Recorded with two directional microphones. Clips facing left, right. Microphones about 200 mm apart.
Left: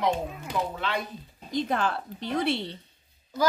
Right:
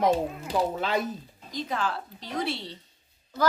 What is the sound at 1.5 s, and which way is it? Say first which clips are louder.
A woman's voice: left 3 dB; 55° left (ahead or behind).